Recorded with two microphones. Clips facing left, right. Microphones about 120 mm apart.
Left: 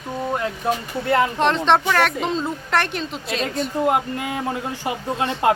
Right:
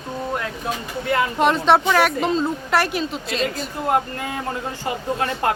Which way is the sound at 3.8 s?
15° left (ahead or behind).